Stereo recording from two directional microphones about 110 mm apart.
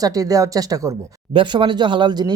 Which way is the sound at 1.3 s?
45° right (ahead or behind).